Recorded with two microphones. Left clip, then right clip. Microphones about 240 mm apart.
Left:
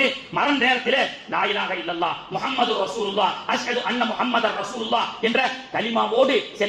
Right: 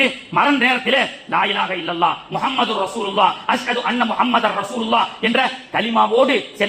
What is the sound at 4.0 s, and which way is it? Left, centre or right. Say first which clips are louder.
A man's voice: right 6 dB; right.